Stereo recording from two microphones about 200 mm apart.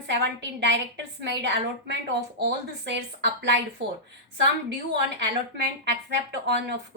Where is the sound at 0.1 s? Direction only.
60° right (ahead or behind).